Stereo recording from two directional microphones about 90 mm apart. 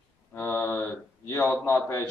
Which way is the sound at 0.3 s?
25° left (ahead or behind).